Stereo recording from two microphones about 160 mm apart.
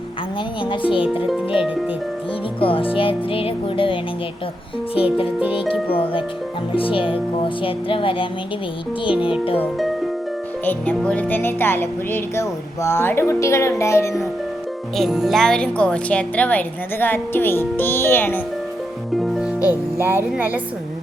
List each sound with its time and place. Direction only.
0.6 s speech: 30° left (ahead or behind)
2.6 s speech: 35° left (ahead or behind)
4.9 s speech: 35° left (ahead or behind)
6.7 s speech: 35° left (ahead or behind)
10.7 s speech: 10° left (ahead or behind)
14.9 s speech: centre (ahead or behind)
19.2 s music: centre (ahead or behind)
20.0 s speech: 15° right (ahead or behind)